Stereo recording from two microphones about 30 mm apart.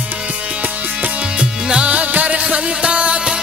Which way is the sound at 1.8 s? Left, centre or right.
Right.